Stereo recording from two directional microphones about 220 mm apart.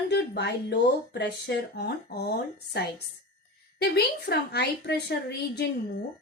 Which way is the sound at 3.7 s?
50° left (ahead or behind).